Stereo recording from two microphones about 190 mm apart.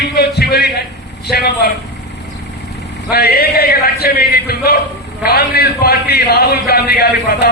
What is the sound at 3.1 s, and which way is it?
A man's voice, 55° left (ahead or behind).